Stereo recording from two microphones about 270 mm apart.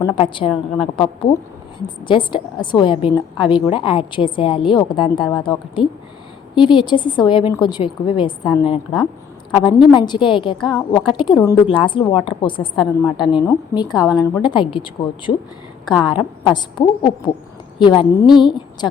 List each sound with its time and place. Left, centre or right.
0.0 s a woman's voice: centre
2.0 s a woman's voice: centre
16.0 s a woman's voice: centre